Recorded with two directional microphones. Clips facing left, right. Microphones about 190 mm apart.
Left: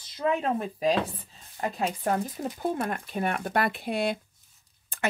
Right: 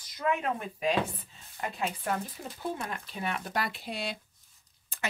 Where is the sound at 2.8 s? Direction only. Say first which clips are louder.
Left 7 dB; 50° left (ahead or behind).